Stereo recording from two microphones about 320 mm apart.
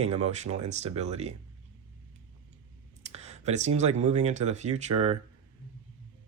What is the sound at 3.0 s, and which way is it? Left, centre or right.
Speech, centre.